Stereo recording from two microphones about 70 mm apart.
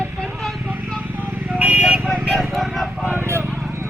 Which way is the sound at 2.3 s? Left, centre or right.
Centre.